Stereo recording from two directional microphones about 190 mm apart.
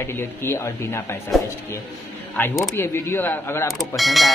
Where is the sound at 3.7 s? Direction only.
Centre (ahead or behind).